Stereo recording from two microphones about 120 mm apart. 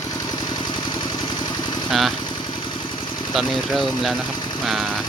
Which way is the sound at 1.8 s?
Centre (ahead or behind).